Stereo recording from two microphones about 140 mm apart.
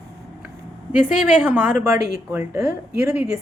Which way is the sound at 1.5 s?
15° right (ahead or behind).